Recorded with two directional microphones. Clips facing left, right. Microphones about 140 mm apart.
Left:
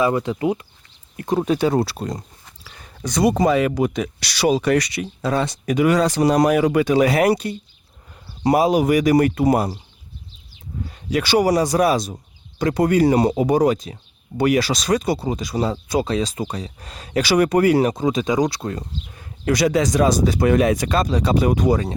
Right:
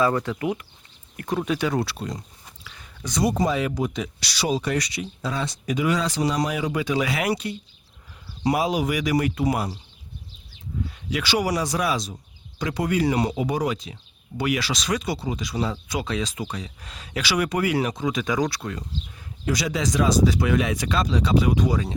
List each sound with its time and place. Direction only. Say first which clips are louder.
0.0 s speech: left 3 dB; 20° left (ahead or behind); by 2.2 s 45° left (ahead or behind)
2.6 s a sound: left 6 dB; 45° left (ahead or behind)
3.2 s speech: left 6 dB; 70° left (ahead or behind); by 9.7 s 45° left (ahead or behind)
10.8 s speech: left 7 dB; 45° left (ahead or behind); by 18.7 s 20° left (ahead or behind)
18.7 s speech: left 4 dB; 45° left (ahead or behind)